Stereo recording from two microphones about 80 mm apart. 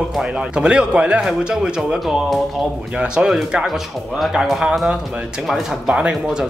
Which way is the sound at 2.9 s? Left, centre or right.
Centre.